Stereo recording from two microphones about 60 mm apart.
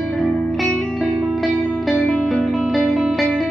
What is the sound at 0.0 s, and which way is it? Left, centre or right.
Music, centre.